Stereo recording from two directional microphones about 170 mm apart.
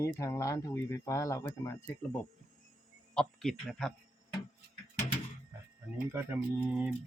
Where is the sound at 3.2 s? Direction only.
Centre (ahead or behind).